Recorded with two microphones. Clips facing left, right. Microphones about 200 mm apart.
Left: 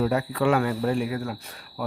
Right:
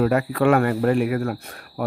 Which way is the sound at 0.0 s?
65° right (ahead or behind).